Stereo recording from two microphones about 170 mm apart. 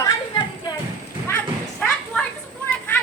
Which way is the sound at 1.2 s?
10° left (ahead or behind).